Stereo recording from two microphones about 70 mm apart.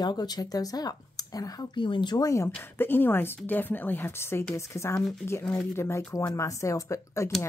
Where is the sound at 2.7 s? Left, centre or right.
Left.